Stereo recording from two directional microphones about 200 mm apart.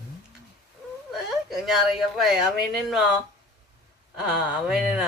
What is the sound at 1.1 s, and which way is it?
Speech, centre (ahead or behind).